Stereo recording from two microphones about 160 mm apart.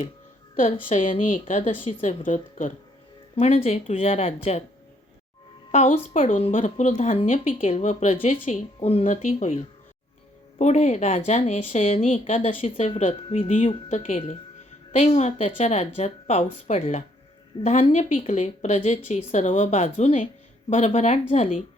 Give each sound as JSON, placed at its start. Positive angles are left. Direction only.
{"t": 0.5, "sound": "speech", "side_deg": 55}
{"t": 3.3, "sound": "speech", "side_deg": 40}
{"t": 5.7, "sound": "speech", "side_deg": 45}